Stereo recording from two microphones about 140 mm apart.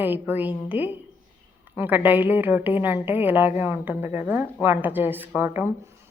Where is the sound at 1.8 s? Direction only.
10° right (ahead or behind).